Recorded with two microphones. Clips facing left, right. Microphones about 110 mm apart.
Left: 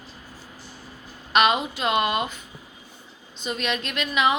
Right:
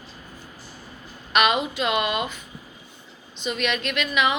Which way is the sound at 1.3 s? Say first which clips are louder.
Left 1 dB; 30° left (ahead or behind).